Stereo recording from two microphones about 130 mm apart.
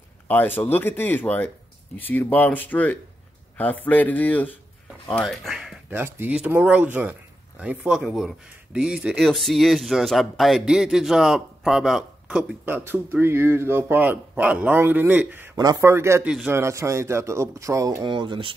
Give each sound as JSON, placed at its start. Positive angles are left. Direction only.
{"t": 0.6, "sound": "speech", "side_deg": 15}
{"t": 5.2, "sound": "speech", "side_deg": 0}
{"t": 5.9, "sound": "speech", "side_deg": -15}
{"t": 15.5, "sound": "speech", "side_deg": -30}